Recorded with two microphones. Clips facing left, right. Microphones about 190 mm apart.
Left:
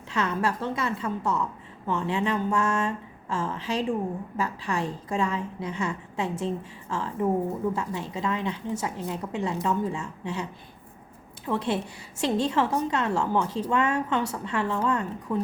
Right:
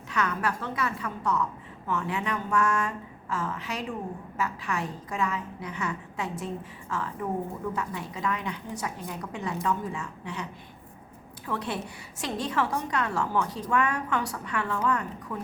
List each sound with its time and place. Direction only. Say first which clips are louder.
0.1 s a woman's voice: left 2 dB; 25° left (ahead or behind)
11.4 s a woman's voice: left 5 dB; 25° left (ahead or behind)